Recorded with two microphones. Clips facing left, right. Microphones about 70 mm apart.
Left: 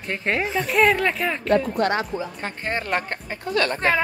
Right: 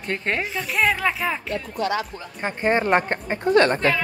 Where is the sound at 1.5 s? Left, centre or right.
Left.